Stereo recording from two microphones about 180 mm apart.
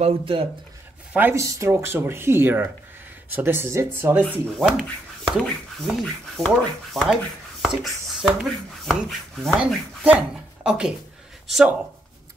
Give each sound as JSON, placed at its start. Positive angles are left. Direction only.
{"t": 0.0, "sound": "speech", "side_deg": -30}
{"t": 1.1, "sound": "speech", "side_deg": -15}